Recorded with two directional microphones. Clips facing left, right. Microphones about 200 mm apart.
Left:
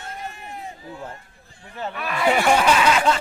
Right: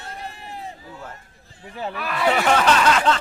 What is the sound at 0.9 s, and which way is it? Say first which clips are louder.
Speech: left 3 dB; 30° left (ahead or behind).